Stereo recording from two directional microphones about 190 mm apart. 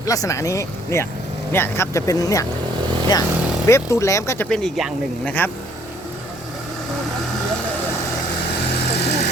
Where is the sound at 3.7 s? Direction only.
15° left (ahead or behind).